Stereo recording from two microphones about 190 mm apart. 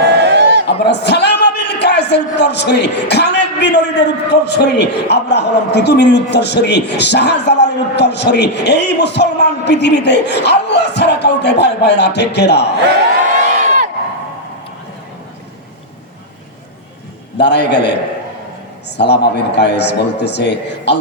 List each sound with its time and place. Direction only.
0.2 s a sound: 65° right (ahead or behind)
0.8 s speech: 65° left (ahead or behind)
13.5 s crowd: 40° right (ahead or behind)
17.3 s speech: 65° left (ahead or behind)
18.9 s speech: 60° left (ahead or behind)